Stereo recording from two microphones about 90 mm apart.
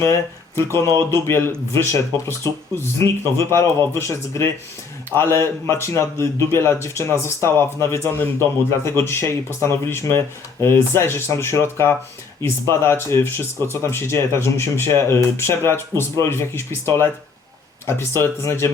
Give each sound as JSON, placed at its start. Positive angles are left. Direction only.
{"t": 0.0, "sound": "speech", "side_deg": 30}